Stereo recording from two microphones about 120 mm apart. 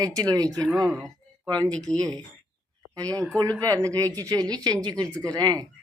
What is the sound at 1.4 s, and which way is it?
Speech, 35° right (ahead or behind).